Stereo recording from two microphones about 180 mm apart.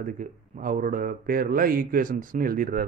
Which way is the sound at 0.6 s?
50° right (ahead or behind).